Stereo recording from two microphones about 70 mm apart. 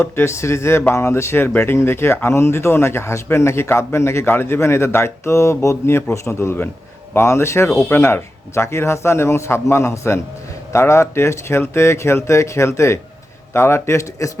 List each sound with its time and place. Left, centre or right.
0.0 s speech: left